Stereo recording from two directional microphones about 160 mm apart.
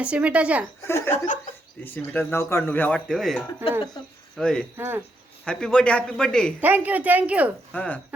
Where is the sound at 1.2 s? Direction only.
55° left (ahead or behind).